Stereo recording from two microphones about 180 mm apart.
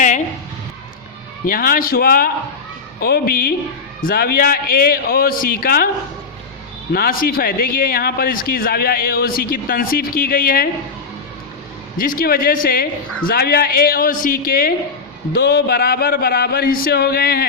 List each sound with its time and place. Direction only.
1.5 s a man's voice: 50° left (ahead or behind)
6.9 s speech: 55° left (ahead or behind)
11.9 s a man's voice: 50° left (ahead or behind)